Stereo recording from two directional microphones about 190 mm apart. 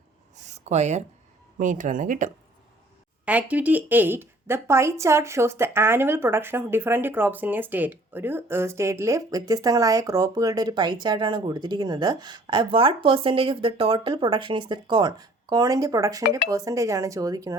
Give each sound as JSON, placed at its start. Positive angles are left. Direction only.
{"t": 0.5, "sound": "speech", "side_deg": -35}
{"t": 3.2, "sound": "speech", "side_deg": -10}